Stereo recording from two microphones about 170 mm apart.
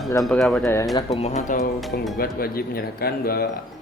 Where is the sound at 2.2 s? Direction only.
60° left (ahead or behind).